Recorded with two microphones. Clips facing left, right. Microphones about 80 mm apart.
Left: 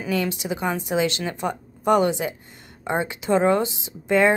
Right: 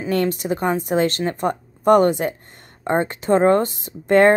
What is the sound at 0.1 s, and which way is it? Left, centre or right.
Speech, right.